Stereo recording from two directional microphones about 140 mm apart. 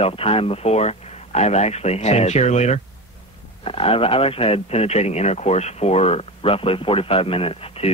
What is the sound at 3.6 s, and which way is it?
Speech, 40° left (ahead or behind).